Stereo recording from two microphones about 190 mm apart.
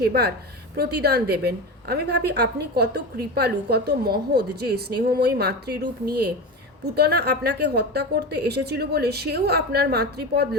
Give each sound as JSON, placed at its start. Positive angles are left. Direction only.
{"t": 0.0, "sound": "a woman's voice", "side_deg": -55}